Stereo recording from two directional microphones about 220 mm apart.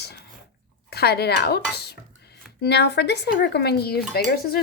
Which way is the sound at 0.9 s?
45° left (ahead or behind).